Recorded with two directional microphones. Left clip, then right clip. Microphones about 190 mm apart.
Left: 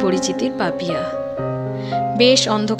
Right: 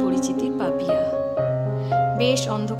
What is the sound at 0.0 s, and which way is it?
Speech, 15° left (ahead or behind).